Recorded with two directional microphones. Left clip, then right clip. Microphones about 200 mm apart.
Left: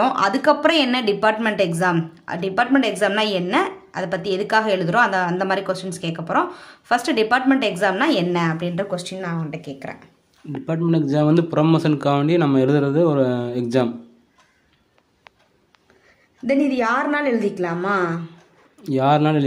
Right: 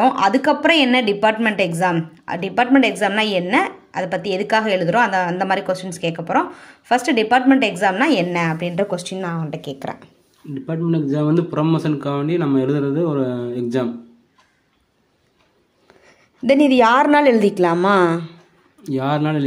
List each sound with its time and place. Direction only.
0.0 s speech: 10° right (ahead or behind); by 9.9 s 25° right (ahead or behind)
10.7 s speech: 10° left (ahead or behind)
16.4 s a woman's voice: 40° right (ahead or behind)
18.8 s speech: 10° left (ahead or behind)